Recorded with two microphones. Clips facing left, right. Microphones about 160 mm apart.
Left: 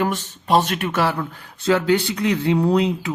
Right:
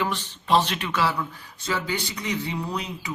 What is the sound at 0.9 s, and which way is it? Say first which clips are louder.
Speech: left 4 dB; 55° left (ahead or behind).